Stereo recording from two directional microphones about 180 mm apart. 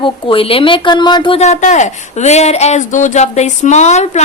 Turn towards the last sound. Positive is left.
turn(degrees=40)  # may be behind; listen again after turning